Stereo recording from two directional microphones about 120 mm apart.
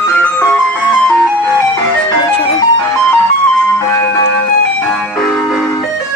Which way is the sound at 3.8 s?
25° left (ahead or behind).